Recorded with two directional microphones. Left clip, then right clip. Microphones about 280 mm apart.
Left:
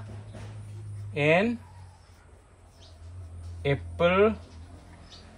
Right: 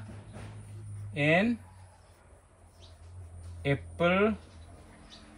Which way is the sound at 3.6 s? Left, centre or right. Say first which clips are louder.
Left 3 dB; centre.